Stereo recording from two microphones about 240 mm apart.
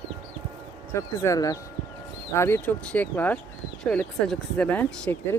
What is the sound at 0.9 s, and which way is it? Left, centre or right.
Speech, centre.